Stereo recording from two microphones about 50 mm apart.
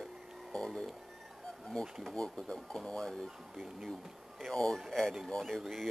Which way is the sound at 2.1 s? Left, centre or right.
Centre.